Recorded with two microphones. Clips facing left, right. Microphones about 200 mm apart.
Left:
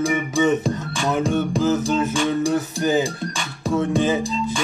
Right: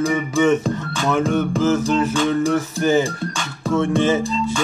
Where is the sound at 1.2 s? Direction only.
15° left (ahead or behind).